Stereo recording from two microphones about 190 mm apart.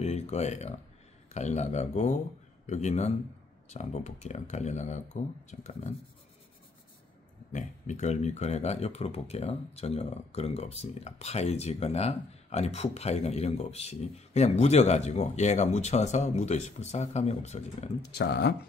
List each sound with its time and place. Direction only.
0.0 s a man's voice: 35° left (ahead or behind)
7.5 s speech: 40° left (ahead or behind)
18.1 s speech: 60° left (ahead or behind)